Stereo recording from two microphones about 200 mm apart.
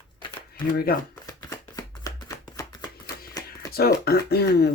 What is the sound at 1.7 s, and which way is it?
Chopping, 15° left (ahead or behind).